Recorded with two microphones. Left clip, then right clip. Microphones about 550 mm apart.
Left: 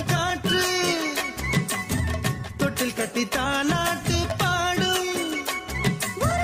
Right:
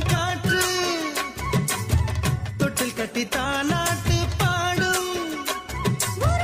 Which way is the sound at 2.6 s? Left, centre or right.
Right.